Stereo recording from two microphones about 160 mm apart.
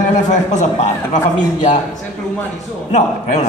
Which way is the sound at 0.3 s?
45° left (ahead or behind).